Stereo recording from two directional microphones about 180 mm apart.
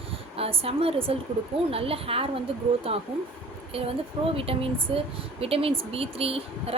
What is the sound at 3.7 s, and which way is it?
A woman's voice, 30° right (ahead or behind).